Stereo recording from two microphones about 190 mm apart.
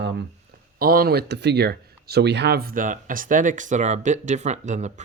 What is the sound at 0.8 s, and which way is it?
Speech, 50° right (ahead or behind).